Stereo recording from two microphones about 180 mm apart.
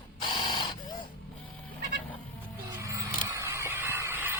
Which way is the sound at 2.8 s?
15° right (ahead or behind).